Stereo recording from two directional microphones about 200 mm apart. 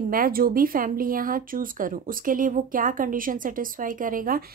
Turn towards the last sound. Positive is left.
turn(degrees=-45)  # may be behind; listen again after turning